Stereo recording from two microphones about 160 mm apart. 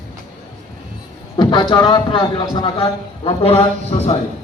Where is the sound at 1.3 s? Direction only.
30° left (ahead or behind).